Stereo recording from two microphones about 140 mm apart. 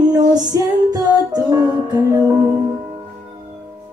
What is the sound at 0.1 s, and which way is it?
Music, 30° right (ahead or behind).